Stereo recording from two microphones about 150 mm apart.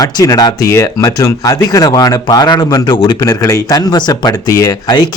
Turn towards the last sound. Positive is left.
turn(degrees=25)  # may be behind; listen again after turning